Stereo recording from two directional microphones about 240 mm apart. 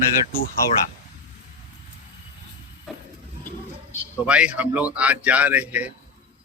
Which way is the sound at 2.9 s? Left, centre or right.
Centre.